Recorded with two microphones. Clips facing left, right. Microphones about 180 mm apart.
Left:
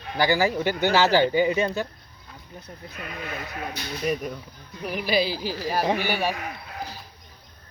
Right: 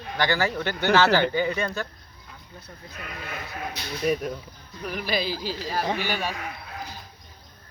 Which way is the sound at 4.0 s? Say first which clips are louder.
Right 2 dB; centre (ahead or behind).